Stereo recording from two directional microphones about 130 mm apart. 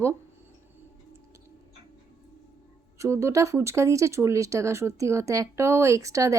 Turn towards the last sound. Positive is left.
turn(degrees=-25)  # may be behind; listen again after turning